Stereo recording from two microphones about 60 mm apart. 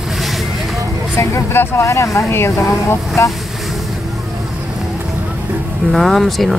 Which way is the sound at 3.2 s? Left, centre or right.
Left.